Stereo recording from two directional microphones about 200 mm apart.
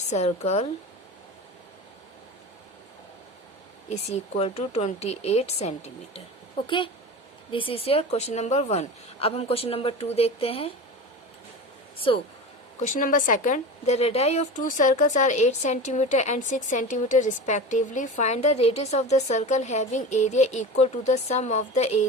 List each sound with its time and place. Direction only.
0.1 s a woman's voice: 35° left (ahead or behind)
3.8 s a woman's voice: 35° left (ahead or behind)
11.9 s a woman's voice: 25° left (ahead or behind)
12.9 s a woman's voice: 40° left (ahead or behind)